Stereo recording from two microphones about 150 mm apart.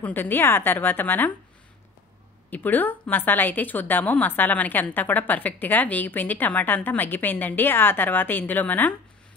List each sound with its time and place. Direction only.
0.0 s a woman's voice: 15° left (ahead or behind)
2.5 s a woman's voice: 10° left (ahead or behind)